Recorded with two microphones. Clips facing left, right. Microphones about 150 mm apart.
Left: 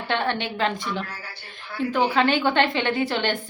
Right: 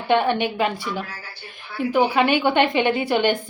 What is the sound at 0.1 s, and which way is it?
A woman's voice, 15° right (ahead or behind).